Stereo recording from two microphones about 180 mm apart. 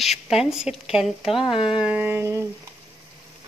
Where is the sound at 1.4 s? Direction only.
30° left (ahead or behind).